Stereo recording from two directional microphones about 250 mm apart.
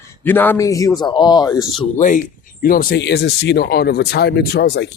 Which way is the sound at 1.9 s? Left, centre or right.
Left.